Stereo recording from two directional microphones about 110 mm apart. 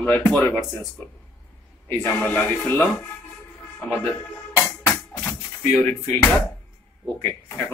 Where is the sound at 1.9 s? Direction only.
15° left (ahead or behind).